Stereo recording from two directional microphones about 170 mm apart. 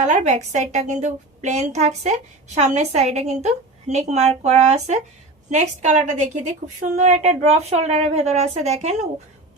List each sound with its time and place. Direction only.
0.0 s a woman's voice: 45° right (ahead or behind)